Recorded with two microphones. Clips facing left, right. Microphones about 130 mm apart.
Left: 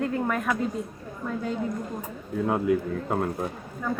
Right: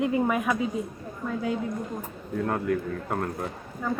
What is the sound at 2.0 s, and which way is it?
Speech, 10° left (ahead or behind).